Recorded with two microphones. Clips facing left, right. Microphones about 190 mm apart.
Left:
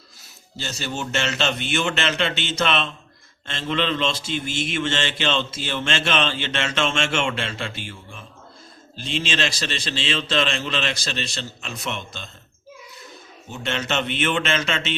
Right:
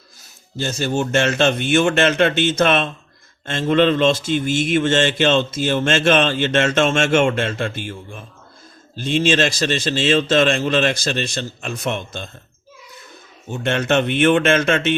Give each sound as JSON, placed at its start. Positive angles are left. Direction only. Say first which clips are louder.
{"t": 0.5, "sound": "a man's voice", "louder": "right 9 dB", "side_deg": -50}
{"t": 13.5, "sound": "a man's voice", "louder": "right 8 dB", "side_deg": -55}